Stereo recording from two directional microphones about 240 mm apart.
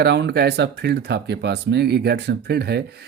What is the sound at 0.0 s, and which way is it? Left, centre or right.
Speech, right.